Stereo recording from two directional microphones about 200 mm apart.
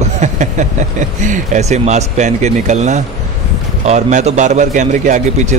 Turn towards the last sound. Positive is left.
turn(degrees=-40)  # may be behind; listen again after turning